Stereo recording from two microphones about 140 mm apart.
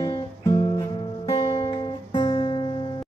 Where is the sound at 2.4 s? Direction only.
35° left (ahead or behind).